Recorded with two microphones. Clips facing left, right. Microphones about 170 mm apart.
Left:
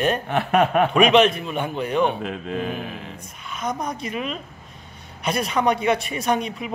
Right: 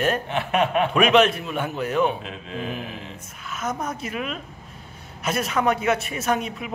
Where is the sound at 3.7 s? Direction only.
15° left (ahead or behind).